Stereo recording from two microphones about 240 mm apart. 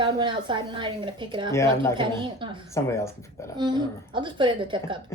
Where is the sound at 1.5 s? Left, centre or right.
Centre.